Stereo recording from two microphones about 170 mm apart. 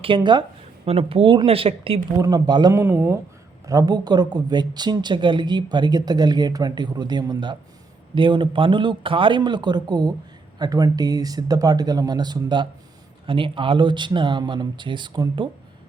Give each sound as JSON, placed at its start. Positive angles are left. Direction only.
{"t": 0.0, "sound": "speech", "side_deg": -30}